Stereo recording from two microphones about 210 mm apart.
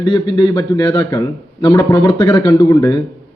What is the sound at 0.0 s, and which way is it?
A man's voice, 20° left (ahead or behind).